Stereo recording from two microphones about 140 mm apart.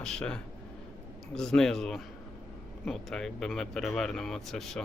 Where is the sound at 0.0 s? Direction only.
5° left (ahead or behind).